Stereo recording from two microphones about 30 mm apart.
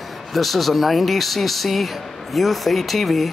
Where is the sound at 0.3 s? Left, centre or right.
Centre.